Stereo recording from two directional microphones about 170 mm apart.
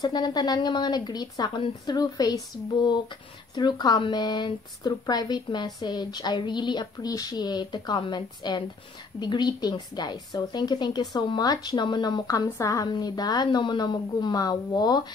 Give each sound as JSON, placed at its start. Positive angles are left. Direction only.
{"t": 0.0, "sound": "a woman's voice", "side_deg": 25}